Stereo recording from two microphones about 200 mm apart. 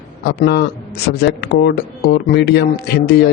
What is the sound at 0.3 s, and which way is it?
Speech, 55° left (ahead or behind).